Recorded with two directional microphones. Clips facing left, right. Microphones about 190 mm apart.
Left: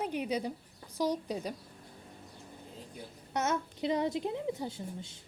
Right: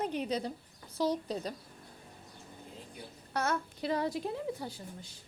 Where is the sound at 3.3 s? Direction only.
20° left (ahead or behind).